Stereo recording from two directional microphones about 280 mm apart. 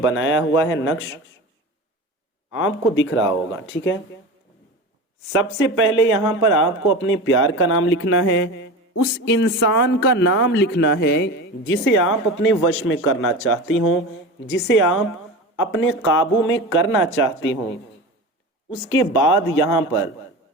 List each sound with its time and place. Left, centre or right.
0.0 s speech: left
2.5 s speech: left
5.3 s speech: left
18.7 s speech: left